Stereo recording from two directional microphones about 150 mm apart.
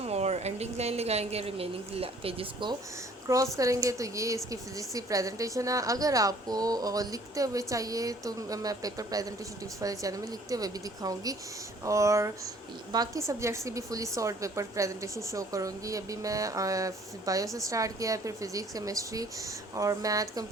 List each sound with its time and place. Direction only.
0.0 s a woman's voice: 45° right (ahead or behind)
3.2 s a woman's voice: 20° right (ahead or behind)